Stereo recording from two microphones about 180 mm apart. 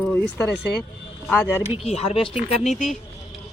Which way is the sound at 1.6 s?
35° left (ahead or behind).